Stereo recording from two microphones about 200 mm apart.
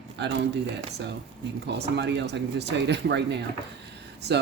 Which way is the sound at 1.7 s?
55° right (ahead or behind).